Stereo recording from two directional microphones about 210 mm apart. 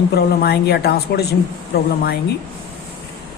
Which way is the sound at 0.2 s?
50° left (ahead or behind).